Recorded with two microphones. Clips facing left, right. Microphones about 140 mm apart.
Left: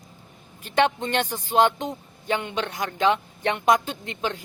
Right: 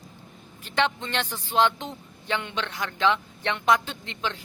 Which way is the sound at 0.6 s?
50° left (ahead or behind).